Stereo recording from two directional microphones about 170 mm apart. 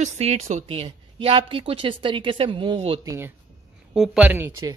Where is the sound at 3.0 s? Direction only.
15° right (ahead or behind).